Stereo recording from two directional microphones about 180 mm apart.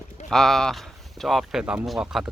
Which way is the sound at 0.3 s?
Centre (ahead or behind).